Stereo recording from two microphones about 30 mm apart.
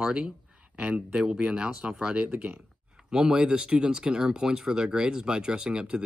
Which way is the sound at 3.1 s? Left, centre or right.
Right.